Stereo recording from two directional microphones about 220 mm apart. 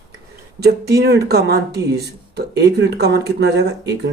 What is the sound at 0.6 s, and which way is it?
Speech, 50° right (ahead or behind).